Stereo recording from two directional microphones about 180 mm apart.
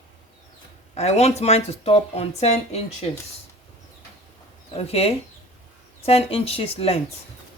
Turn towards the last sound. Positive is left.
turn(degrees=35)  # may be behind; listen again after turning